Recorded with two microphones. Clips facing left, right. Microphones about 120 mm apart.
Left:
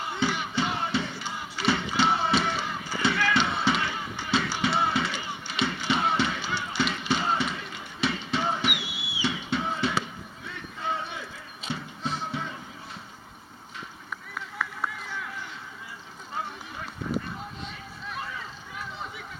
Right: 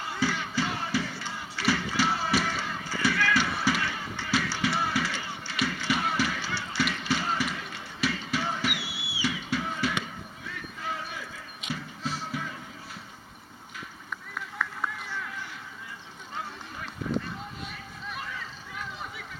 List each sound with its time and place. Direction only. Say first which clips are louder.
0.1 s music: left 1 dB; 20° left (ahead or behind)
8.0 s a sound: left 2 dB; 25° left (ahead or behind)
10.4 s basketball bounce: left 4 dB; 30° left (ahead or behind)
12.2 s music: left 2 dB; 25° left (ahead or behind)